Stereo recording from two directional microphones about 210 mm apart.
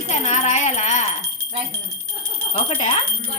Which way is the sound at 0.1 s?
30° left (ahead or behind).